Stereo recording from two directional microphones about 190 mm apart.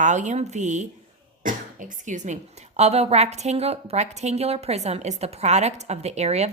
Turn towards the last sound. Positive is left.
turn(degrees=-35)  # may be behind; listen again after turning